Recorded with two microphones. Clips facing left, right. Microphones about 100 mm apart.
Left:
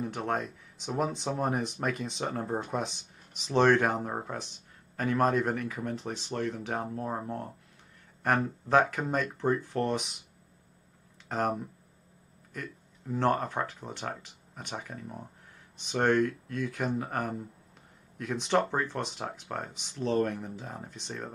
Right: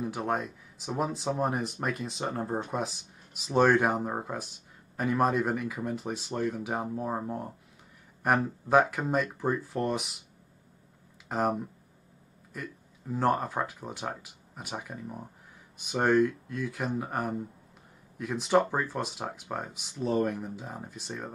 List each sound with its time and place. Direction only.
0.0 s speech: 5° right (ahead or behind)
11.2 s speech: 5° right (ahead or behind)
12.6 s speech: 5° right (ahead or behind)